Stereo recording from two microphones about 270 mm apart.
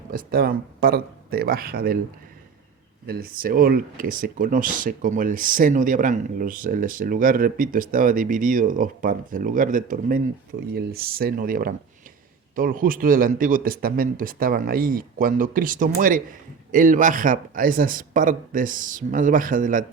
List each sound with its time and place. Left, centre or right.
0.1 s speech: right
3.1 s speech: right